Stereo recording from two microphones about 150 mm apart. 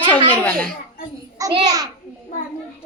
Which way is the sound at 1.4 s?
20° right (ahead or behind).